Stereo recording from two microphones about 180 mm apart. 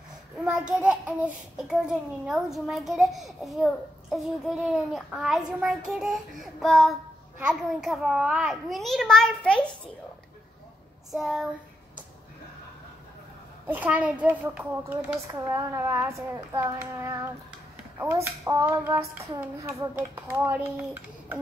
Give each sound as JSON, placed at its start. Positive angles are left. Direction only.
{"t": 0.4, "sound": "a child's voice", "side_deg": -5}
{"t": 11.1, "sound": "a child's voice", "side_deg": 0}
{"t": 13.7, "sound": "hands", "side_deg": -10}
{"t": 15.3, "sound": "a child's voice", "side_deg": -20}
{"t": 16.5, "sound": "hands", "side_deg": -15}